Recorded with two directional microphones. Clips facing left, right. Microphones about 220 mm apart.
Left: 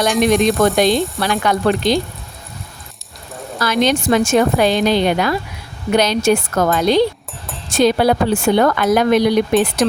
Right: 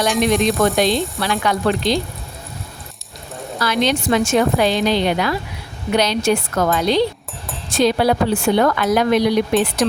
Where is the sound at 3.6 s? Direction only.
45° left (ahead or behind).